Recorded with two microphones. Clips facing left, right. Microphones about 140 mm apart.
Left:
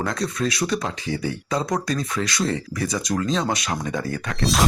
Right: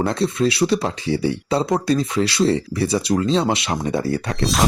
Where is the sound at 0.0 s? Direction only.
30° right (ahead or behind).